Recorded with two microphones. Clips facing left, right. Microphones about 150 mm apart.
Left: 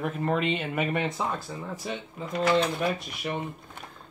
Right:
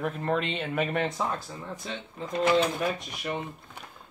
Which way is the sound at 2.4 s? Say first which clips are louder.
Even; 20° right (ahead or behind).